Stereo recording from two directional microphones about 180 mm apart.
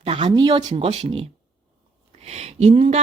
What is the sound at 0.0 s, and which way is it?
A woman's voice, 30° right (ahead or behind).